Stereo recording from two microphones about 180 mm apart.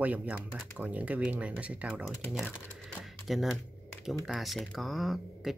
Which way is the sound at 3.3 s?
Centre (ahead or behind).